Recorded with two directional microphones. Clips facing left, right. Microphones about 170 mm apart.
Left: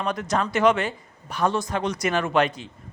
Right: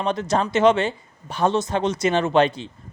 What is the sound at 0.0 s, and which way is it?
Speech, 25° right (ahead or behind).